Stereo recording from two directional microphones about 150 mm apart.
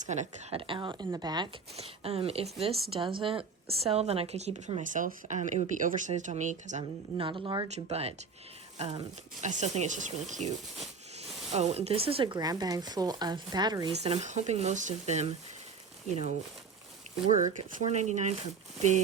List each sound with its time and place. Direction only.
0.0 s a woman's voice: 50° right (ahead or behind)
0.7 s speech: 35° right (ahead or behind)
1.7 s a woman's voice: 40° right (ahead or behind)
7.2 s speech: 35° right (ahead or behind)
7.7 s a woman's voice: 45° right (ahead or behind)
9.4 s a woman's voice: 55° right (ahead or behind)
11.5 s speech: 45° right (ahead or behind); by 13.9 s 30° right (ahead or behind)
13.9 s a woman's voice: 45° right (ahead or behind)
17.4 s a woman's voice: 55° right (ahead or behind)